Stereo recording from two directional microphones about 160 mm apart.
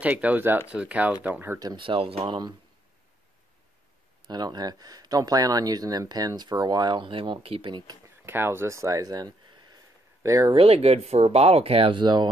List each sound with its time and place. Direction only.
0.0 s speech: 10° right (ahead or behind); by 2.5 s 30° right (ahead or behind)
4.3 s speech: 25° right (ahead or behind)
8.3 s speech: 15° right (ahead or behind)
10.5 s speech: 35° right (ahead or behind)